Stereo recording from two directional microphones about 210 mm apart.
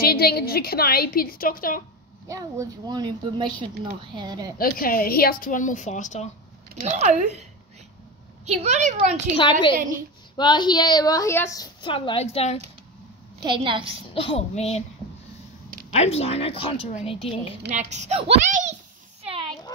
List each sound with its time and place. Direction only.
0.0 s a woman's voice: 45° left (ahead or behind)
2.2 s a woman's voice: 15° right (ahead or behind)
4.6 s a woman's voice: 45° left (ahead or behind)
6.8 s a child's voice: 35° right (ahead or behind)
8.5 s a child's voice: 30° right (ahead or behind)
9.4 s a woman's voice: 25° left (ahead or behind)
13.4 s a woman's voice: 20° right (ahead or behind)
14.1 s a woman's voice: 25° left (ahead or behind)
15.9 s a woman's voice: 30° left (ahead or behind)
17.7 s a child's voice: 35° right (ahead or behind)